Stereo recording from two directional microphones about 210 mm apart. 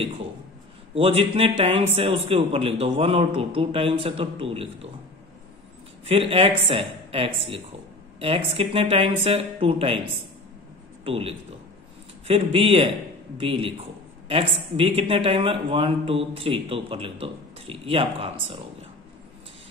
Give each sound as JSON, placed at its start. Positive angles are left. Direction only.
{"t": 0.9, "sound": "speech", "side_deg": -25}
{"t": 6.0, "sound": "speech", "side_deg": -25}
{"t": 11.1, "sound": "speech", "side_deg": -25}